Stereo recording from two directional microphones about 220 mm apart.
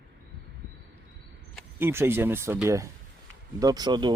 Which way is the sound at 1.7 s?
10° right (ahead or behind).